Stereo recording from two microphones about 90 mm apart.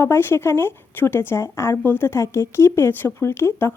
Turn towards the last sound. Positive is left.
turn(degrees=30)  # may be behind; listen again after turning